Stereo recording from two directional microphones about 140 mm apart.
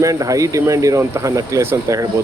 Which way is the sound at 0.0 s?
25° right (ahead or behind).